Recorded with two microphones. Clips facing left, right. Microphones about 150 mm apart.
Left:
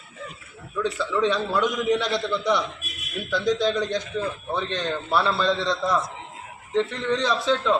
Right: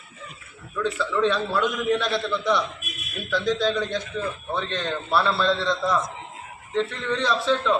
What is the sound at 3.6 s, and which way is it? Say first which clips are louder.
A man's voice: left 1 dB; 5° right (ahead or behind).